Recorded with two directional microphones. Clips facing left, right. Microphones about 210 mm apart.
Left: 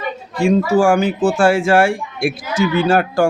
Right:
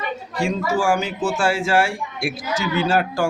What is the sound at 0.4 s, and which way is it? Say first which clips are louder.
Speech: left 7 dB; 55° left (ahead or behind).